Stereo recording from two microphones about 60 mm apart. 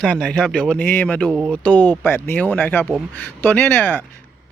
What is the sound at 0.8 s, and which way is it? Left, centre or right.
Speech, left.